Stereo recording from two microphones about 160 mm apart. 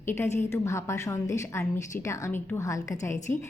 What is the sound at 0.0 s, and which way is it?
A woman's voice, 15° left (ahead or behind).